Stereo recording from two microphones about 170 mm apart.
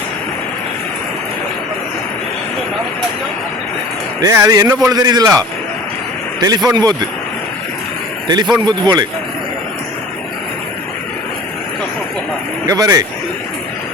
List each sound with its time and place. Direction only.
4.2 s a man's voice: 20° right (ahead or behind)
8.3 s a man's voice: 25° right (ahead or behind)
12.6 s a man's voice: 20° right (ahead or behind)